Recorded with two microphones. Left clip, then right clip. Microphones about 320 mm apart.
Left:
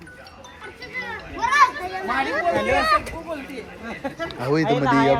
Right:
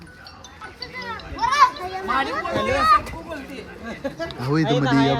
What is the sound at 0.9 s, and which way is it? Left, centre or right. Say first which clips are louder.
Children playing: left 2 dB; centre.